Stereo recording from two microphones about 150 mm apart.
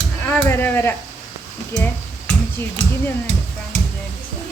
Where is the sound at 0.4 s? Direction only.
15° left (ahead or behind).